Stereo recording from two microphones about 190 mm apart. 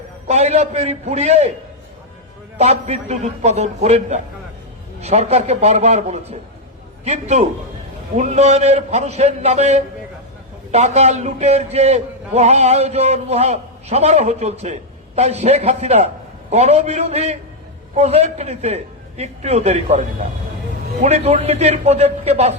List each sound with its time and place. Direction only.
0.3 s a man's voice: 35° right (ahead or behind)
2.6 s a man's voice: 35° right (ahead or behind)